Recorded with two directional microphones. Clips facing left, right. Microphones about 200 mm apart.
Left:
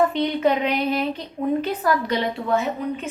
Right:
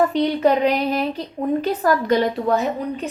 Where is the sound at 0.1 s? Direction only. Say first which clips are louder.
Right 3 dB; 40° right (ahead or behind).